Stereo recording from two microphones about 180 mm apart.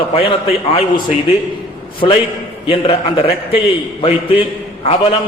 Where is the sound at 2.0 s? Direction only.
35° left (ahead or behind).